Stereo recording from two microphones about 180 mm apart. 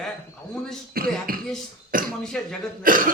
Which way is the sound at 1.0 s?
55° right (ahead or behind).